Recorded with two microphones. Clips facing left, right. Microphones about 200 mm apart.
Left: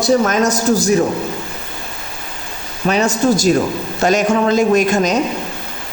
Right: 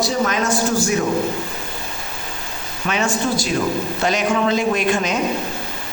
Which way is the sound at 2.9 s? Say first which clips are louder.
Left 6 dB; 40° left (ahead or behind).